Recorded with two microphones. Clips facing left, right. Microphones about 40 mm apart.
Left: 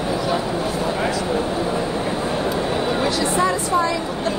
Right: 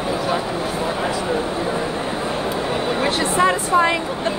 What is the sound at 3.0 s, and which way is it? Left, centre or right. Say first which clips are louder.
Speech: right 3 dB; right.